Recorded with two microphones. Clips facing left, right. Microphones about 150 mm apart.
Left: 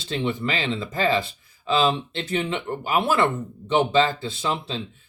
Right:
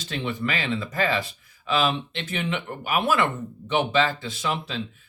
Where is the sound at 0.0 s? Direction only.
25° left (ahead or behind).